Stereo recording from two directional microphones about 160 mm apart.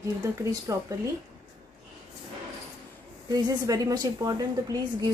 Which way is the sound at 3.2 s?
25° right (ahead or behind).